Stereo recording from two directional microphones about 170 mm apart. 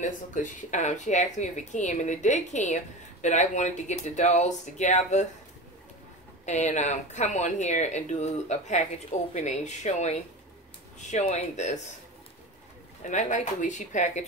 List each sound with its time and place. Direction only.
0.0 s speech: 50° left (ahead or behind)
6.4 s speech: 45° left (ahead or behind)
13.0 s speech: 45° left (ahead or behind)